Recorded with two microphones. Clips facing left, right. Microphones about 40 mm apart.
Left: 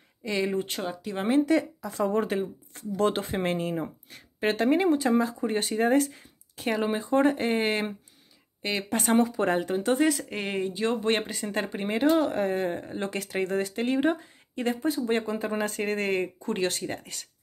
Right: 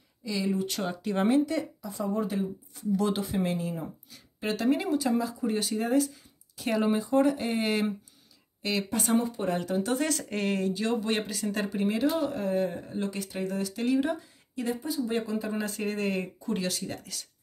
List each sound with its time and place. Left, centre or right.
0.2 s speech: left
0.8 s speech: centre
1.5 s speech: left
3.0 s speech: left
4.6 s speech: left
6.7 s speech: centre
7.0 s speech: left
8.8 s speech: left
9.7 s speech: left
10.0 s speech: centre
11.1 s speech: left
12.3 s speech: left
12.8 s speech: left
13.1 s speech: left